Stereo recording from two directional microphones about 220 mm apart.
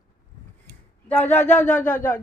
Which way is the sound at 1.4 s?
35° left (ahead or behind).